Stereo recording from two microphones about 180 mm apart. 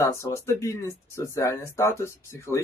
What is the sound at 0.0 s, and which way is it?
Speech, 15° left (ahead or behind).